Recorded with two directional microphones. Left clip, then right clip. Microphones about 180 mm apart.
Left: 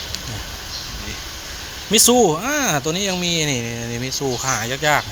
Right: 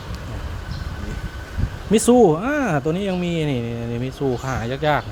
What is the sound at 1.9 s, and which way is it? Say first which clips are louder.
Speech: left 1 dB; 30° right (ahead or behind).